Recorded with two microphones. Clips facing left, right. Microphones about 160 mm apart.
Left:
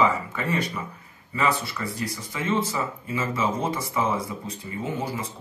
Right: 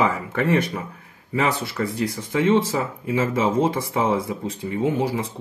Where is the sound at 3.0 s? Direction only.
60° right (ahead or behind).